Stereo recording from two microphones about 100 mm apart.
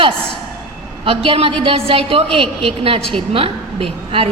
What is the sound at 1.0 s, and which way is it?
A woman's voice, 65° right (ahead or behind).